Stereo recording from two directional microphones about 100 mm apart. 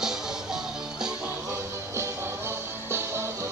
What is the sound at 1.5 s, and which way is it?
Music, 25° right (ahead or behind).